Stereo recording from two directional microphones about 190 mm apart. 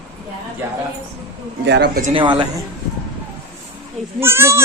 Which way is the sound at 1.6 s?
65° right (ahead or behind).